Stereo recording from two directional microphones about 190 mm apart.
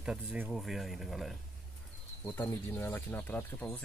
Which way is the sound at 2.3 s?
10° left (ahead or behind).